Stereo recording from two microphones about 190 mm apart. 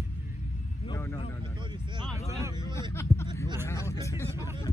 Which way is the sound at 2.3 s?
15° right (ahead or behind).